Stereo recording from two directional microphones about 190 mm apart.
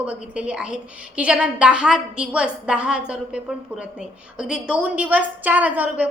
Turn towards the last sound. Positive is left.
turn(degrees=-10)  # may be behind; listen again after turning